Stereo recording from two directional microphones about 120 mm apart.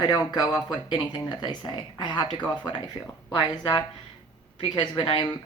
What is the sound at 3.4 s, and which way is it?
Speech, 40° left (ahead or behind).